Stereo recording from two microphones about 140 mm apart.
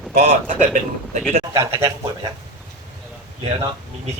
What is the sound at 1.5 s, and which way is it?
Speech, 25° right (ahead or behind).